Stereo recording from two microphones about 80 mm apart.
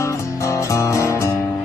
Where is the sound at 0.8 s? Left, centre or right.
Left.